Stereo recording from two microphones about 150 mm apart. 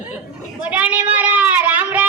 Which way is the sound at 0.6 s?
10° right (ahead or behind).